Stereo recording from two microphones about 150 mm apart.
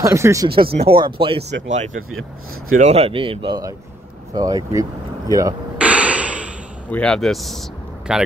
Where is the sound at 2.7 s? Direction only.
45° right (ahead or behind); by 4.9 s 25° right (ahead or behind).